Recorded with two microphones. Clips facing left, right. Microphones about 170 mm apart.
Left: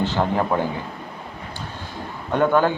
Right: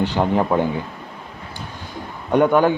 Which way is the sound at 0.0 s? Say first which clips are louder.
Right 3 dB; 15° right (ahead or behind).